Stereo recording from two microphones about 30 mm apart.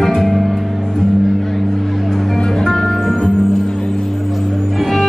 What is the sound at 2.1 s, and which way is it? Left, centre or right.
Music, centre.